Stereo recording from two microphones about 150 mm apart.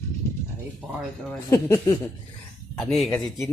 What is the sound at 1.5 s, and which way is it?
Speech, 20° left (ahead or behind).